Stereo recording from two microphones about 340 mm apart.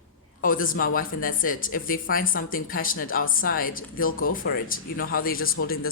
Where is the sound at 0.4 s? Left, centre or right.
Left.